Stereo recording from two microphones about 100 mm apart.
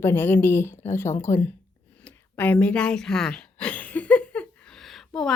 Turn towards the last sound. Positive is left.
turn(degrees=0)  # may be behind; listen again after turning